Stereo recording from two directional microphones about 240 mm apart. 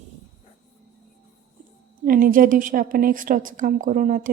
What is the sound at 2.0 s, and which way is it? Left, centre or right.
A woman's voice, right.